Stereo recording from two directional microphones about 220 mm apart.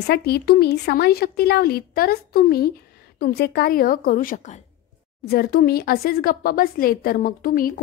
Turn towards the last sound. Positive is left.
turn(degrees=40)  # may be behind; listen again after turning